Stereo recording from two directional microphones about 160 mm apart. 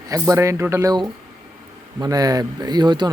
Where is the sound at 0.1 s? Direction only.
20° right (ahead or behind).